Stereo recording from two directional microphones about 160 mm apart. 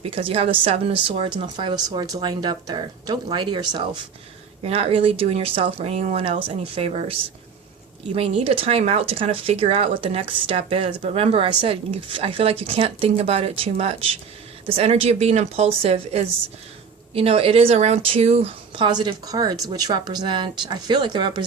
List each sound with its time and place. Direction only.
0.0 s a woman's voice: 35° right (ahead or behind)
4.6 s speech: 40° right (ahead or behind)
18.9 s a woman's voice: 25° right (ahead or behind)